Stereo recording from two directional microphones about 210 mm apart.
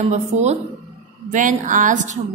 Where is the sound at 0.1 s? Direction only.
30° right (ahead or behind).